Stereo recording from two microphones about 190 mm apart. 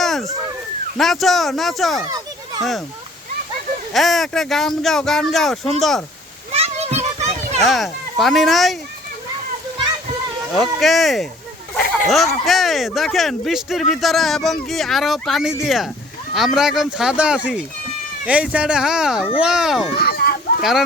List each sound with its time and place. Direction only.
0.0 s a sound: centre (ahead or behind)
0.9 s speech: centre (ahead or behind)
3.9 s speech: centre (ahead or behind)
6.5 s children playing: 35° right (ahead or behind)
7.6 s speech: centre (ahead or behind)
10.5 s speech: centre (ahead or behind)
20.0 s a sound: 55° left (ahead or behind)
20.6 s speech: centre (ahead or behind)